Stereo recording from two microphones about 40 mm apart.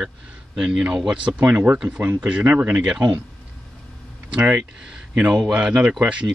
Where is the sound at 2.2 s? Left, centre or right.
Right.